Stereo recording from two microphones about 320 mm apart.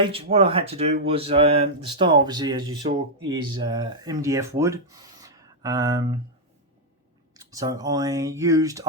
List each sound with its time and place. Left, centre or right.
0.0 s speech: centre
7.5 s speech: centre